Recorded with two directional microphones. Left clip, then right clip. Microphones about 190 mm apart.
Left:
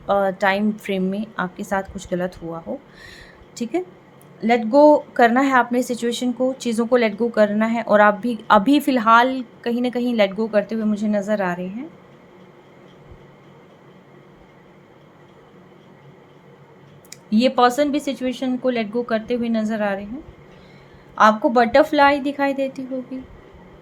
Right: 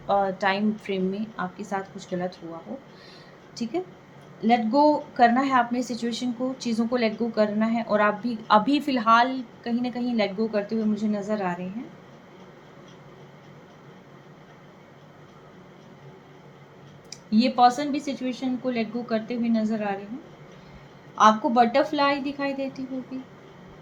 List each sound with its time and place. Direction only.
0.1 s a woman's voice: 45° left (ahead or behind)
3.5 s a woman's voice: 55° left (ahead or behind)
17.1 s a woman's voice: 55° left (ahead or behind)
21.2 s a woman's voice: 55° left (ahead or behind)